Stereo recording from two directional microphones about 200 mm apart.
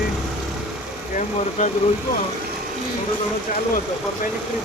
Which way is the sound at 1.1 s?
35° left (ahead or behind).